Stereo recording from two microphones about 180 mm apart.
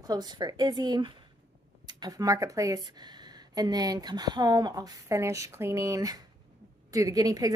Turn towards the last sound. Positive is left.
turn(degrees=-20)  # may be behind; listen again after turning